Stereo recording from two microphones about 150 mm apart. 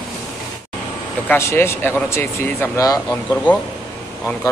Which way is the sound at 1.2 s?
15° left (ahead or behind).